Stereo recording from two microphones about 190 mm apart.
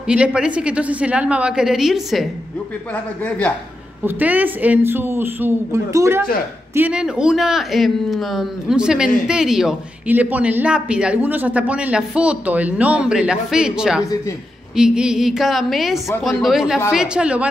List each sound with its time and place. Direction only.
0.0 s a man's voice: 5° right (ahead or behind)
4.0 s a man's voice: 10° right (ahead or behind)